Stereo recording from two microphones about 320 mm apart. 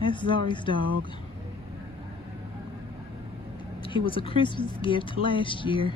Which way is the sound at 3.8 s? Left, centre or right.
Centre.